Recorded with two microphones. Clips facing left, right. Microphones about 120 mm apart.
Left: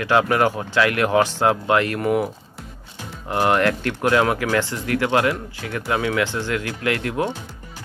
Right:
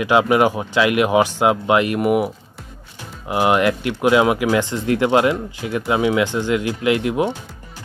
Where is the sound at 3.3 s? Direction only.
15° right (ahead or behind).